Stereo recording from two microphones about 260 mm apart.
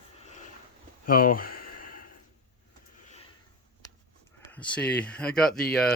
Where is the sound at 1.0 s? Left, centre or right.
Left.